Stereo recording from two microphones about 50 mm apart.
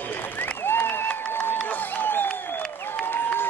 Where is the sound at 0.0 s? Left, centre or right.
Left.